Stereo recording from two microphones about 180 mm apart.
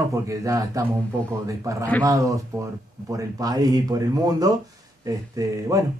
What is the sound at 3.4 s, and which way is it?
Speech, 20° right (ahead or behind).